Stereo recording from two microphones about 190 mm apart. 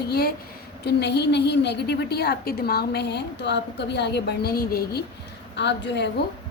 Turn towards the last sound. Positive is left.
turn(degrees=65)  # may be behind; listen again after turning